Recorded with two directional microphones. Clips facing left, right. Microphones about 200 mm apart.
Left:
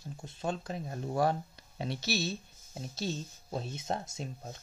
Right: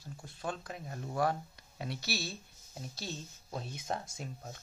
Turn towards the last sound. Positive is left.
turn(degrees=25)  # may be behind; listen again after turning